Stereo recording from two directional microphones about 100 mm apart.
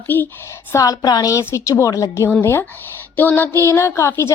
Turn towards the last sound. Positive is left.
turn(degrees=25)  # may be behind; listen again after turning